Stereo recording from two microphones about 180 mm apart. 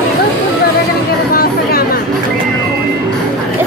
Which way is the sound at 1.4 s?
60° left (ahead or behind).